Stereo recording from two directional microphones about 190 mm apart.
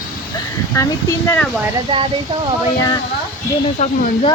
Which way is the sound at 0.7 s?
15° left (ahead or behind).